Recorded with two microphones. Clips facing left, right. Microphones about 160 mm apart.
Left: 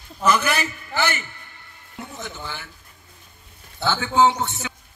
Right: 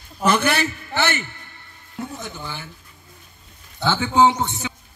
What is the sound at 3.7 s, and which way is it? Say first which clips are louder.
Speech: right 2 dB; 20° right (ahead or behind).